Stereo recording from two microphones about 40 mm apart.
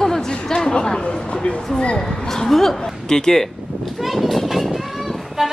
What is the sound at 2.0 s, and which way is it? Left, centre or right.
A woman's voice, centre.